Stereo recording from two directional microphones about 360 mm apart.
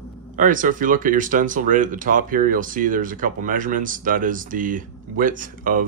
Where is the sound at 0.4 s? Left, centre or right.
Right.